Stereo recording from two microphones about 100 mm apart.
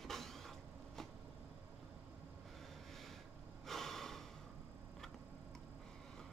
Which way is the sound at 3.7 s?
5° left (ahead or behind).